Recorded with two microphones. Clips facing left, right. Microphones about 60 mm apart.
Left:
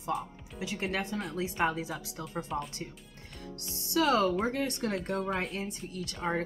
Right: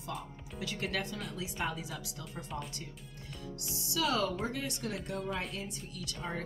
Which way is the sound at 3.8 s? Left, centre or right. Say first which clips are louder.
Left 6 dB; left.